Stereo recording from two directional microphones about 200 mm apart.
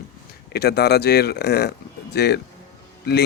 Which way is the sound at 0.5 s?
55° left (ahead or behind).